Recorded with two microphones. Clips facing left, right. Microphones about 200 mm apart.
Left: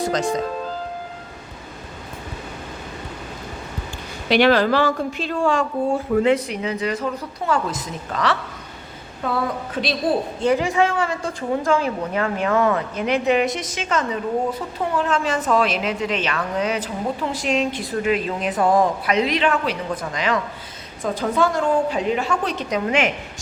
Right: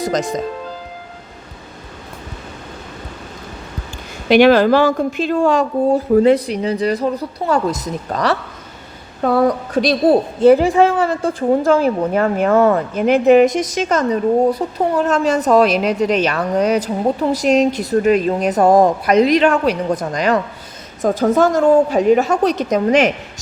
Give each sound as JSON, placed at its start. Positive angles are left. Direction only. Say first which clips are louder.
{"t": 4.3, "sound": "a woman's voice", "louder": "right 6 dB", "side_deg": -45}